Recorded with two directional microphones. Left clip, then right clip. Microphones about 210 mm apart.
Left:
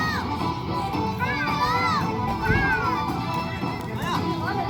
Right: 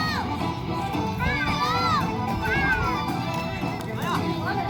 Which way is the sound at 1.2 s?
50° right (ahead or behind).